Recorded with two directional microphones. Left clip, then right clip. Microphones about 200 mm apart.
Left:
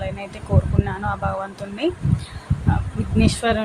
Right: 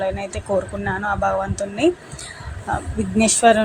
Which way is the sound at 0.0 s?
15° right (ahead or behind).